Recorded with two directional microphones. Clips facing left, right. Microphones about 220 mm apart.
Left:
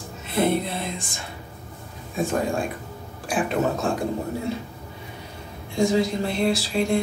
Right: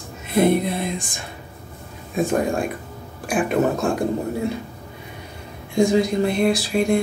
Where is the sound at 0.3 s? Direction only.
15° right (ahead or behind).